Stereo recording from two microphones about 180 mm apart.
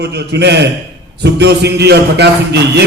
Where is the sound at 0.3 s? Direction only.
70° right (ahead or behind).